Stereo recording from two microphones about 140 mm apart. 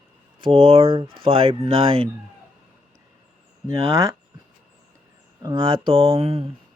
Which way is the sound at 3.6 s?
25° right (ahead or behind).